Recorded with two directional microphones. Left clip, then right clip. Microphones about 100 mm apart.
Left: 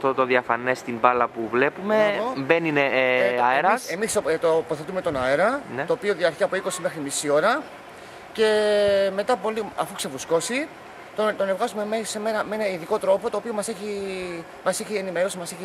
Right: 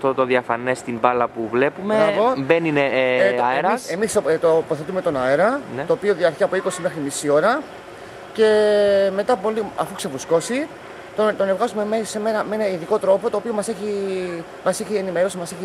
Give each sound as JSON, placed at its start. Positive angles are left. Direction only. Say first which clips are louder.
{"t": 0.0, "sound": "a man's voice", "louder": "right 2 dB", "side_deg": 20}
{"t": 4.0, "sound": "speech", "louder": "right 4 dB", "side_deg": 0}